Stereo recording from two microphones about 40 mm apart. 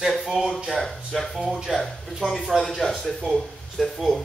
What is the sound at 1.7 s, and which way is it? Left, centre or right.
Speech, right.